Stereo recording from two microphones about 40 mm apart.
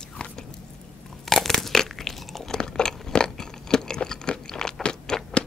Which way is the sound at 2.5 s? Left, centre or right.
Centre.